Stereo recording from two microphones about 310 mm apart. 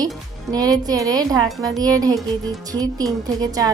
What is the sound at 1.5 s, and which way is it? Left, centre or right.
Speech, centre.